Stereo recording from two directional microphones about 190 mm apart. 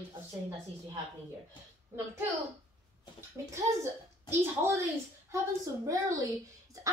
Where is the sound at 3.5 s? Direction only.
15° right (ahead or behind).